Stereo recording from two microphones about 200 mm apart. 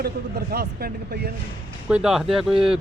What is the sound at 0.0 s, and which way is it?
A man's voice, 50° right (ahead or behind).